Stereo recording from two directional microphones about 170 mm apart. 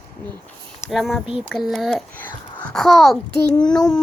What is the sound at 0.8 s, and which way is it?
Speech, centre (ahead or behind).